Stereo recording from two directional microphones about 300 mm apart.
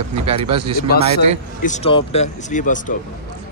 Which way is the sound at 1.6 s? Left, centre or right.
Left.